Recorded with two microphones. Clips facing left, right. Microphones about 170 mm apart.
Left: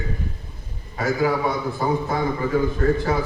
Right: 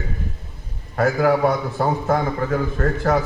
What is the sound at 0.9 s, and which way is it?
A man's voice, 65° right (ahead or behind).